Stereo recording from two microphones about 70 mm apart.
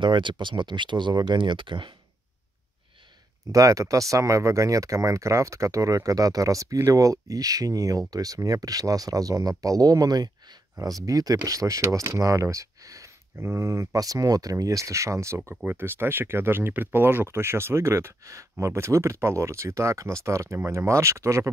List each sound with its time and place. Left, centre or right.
0.3 s speech: right
3.5 s speech: right
10.8 s speech: right
13.4 s speech: right
13.9 s speech: right
15.6 s speech: right